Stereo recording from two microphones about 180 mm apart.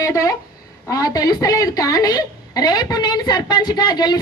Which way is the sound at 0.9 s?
20° left (ahead or behind).